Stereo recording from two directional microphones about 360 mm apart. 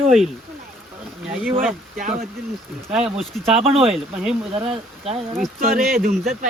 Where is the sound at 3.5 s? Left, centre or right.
Centre.